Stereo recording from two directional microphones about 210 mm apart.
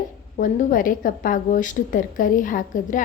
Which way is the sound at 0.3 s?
40° left (ahead or behind).